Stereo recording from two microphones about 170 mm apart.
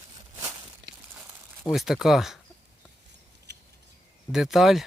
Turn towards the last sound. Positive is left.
turn(degrees=0)  # may be behind; listen again after turning